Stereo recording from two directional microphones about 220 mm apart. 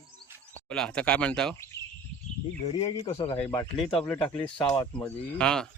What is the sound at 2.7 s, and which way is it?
Speech, 25° left (ahead or behind).